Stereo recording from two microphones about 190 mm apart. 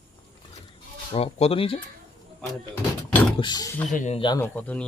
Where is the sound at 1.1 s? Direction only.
30° left (ahead or behind).